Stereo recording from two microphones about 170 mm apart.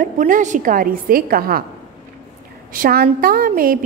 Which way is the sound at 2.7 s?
60° right (ahead or behind).